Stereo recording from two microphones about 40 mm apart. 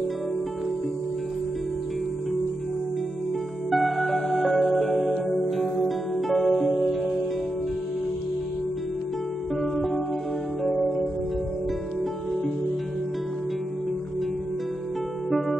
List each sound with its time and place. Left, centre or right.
3.7 s music: centre
5.4 s music: centre
5.9 s music: centre
9.6 s music: centre